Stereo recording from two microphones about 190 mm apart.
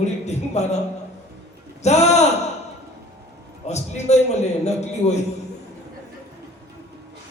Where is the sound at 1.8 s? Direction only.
35° left (ahead or behind).